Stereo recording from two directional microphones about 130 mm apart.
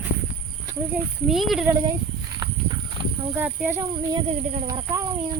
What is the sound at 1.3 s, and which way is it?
Speech, centre (ahead or behind).